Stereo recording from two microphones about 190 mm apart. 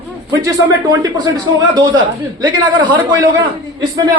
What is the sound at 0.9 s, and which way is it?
A man's voice, 20° right (ahead or behind).